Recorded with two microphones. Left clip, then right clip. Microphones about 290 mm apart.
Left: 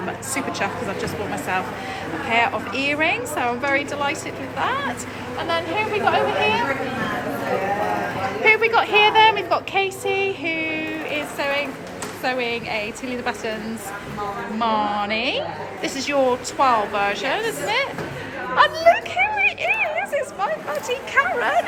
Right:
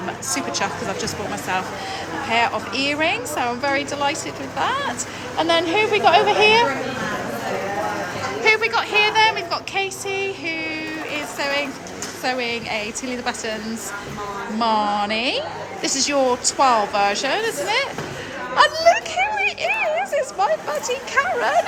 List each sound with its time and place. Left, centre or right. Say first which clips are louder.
0.3 s a woman's voice: even; centre
8.4 s a woman's voice: left 2 dB; centre
14.6 s a woman's voice: right 2 dB; centre
18.5 s a sound: even; centre